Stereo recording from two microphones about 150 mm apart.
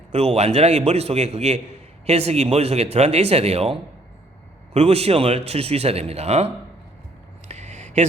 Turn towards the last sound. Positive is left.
turn(degrees=-50)  # may be behind; listen again after turning